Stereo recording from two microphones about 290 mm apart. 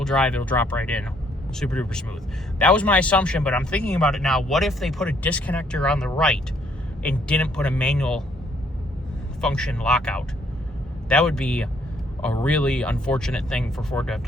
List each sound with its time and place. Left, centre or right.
0.0 s a man's voice: centre
9.4 s a man's voice: centre